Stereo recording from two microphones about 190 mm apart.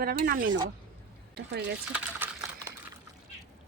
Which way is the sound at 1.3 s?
60° right (ahead or behind).